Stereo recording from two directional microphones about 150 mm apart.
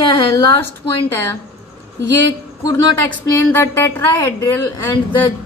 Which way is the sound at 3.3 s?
15° left (ahead or behind).